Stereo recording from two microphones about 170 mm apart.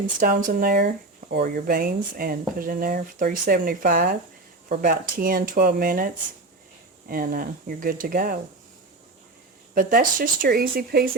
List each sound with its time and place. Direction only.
0.2 s speech: 55° right (ahead or behind)
7.1 s speech: 55° right (ahead or behind)
9.7 s speech: 55° right (ahead or behind)